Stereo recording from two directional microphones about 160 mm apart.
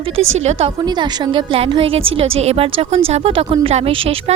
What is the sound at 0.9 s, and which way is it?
A woman's voice, 25° right (ahead or behind).